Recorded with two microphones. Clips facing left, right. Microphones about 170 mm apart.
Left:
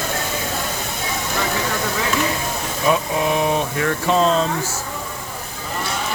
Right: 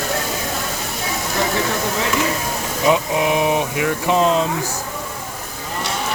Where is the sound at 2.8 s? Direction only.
15° right (ahead or behind).